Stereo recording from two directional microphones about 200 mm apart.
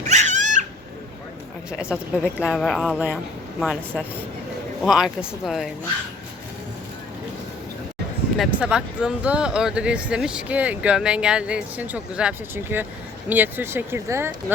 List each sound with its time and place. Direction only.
0.1 s cat: 35° right (ahead or behind)
1.8 s speech: 5° right (ahead or behind)
8.4 s speech: 5° right (ahead or behind)